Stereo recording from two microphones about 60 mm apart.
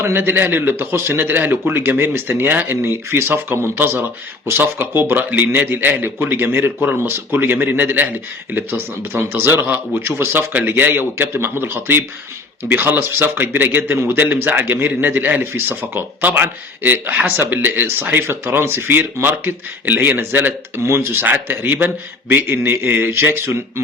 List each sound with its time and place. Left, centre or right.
0.0 s a man's voice: right